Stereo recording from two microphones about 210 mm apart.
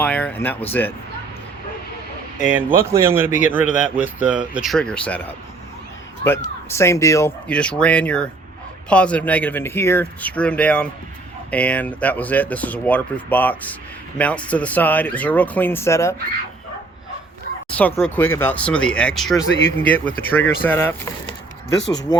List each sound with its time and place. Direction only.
0.0 s speech: 5° left (ahead or behind)
2.4 s a man's voice: 5° right (ahead or behind)
6.7 s speech: 15° left (ahead or behind)
17.7 s speech: 5° left (ahead or behind)
22.1 s speech: 20° left (ahead or behind)